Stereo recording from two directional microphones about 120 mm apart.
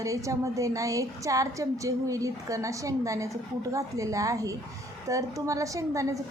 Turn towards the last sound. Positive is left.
turn(degrees=-25)  # may be behind; listen again after turning